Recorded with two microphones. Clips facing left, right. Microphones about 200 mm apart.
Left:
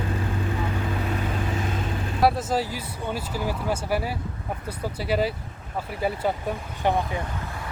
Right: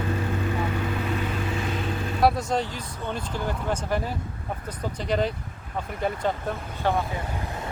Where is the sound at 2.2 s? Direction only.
5° left (ahead or behind).